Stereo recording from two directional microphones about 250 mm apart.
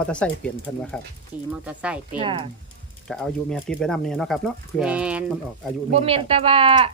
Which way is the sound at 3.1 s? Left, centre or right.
Centre.